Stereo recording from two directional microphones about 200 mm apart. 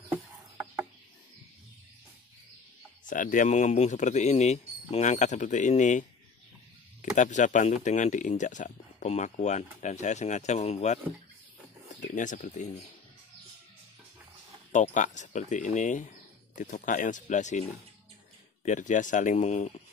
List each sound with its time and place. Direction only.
0.1 s a sound: 10° right (ahead or behind)
3.1 s speech: 40° left (ahead or behind)
12.2 s speech: 40° left (ahead or behind)
14.7 s speech: 40° left (ahead or behind)